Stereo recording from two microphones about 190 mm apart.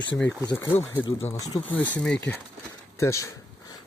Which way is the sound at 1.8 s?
5° left (ahead or behind).